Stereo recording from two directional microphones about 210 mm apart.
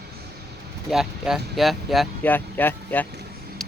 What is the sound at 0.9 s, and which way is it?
Speech, centre (ahead or behind).